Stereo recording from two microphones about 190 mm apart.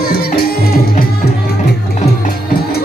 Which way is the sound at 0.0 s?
55° left (ahead or behind).